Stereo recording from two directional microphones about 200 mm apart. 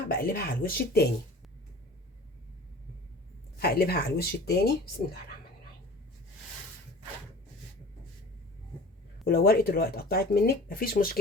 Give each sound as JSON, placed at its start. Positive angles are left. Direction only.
{"t": 0.1, "sound": "speech", "side_deg": 50}
{"t": 3.6, "sound": "speech", "side_deg": 50}
{"t": 9.2, "sound": "speech", "side_deg": 50}